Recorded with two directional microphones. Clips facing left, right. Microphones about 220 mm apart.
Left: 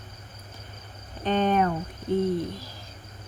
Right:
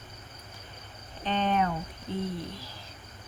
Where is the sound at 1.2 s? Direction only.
45° left (ahead or behind).